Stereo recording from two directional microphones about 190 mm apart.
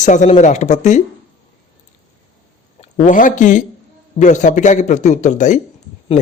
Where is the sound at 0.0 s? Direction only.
40° left (ahead or behind).